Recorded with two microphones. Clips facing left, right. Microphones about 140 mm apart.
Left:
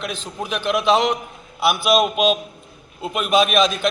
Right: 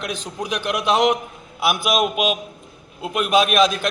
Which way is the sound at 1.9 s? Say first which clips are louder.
Left 4 dB; centre (ahead or behind).